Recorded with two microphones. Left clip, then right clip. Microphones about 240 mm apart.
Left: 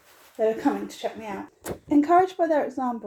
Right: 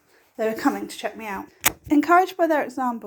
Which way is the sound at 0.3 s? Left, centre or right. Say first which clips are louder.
Even; right.